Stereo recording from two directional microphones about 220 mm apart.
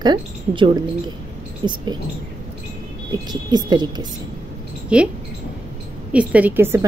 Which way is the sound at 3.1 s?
20° right (ahead or behind).